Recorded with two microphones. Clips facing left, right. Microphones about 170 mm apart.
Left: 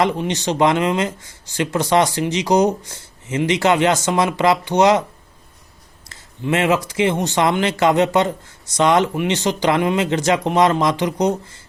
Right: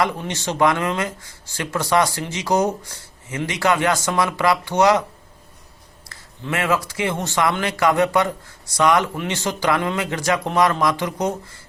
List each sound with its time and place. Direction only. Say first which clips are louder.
0.0 s speech: left 4 dB; 20° left (ahead or behind)
6.1 s speech: left 6 dB; 20° left (ahead or behind)